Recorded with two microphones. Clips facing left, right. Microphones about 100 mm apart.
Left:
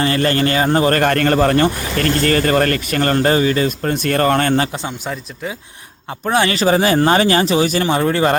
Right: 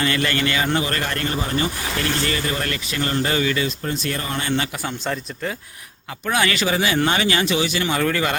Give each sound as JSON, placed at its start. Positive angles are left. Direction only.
{"t": 0.0, "sound": "speech", "side_deg": 35}
{"t": 3.3, "sound": "speech", "side_deg": 35}
{"t": 3.8, "sound": "speech", "side_deg": 55}
{"t": 5.0, "sound": "speech", "side_deg": 5}
{"t": 6.2, "sound": "speech", "side_deg": 30}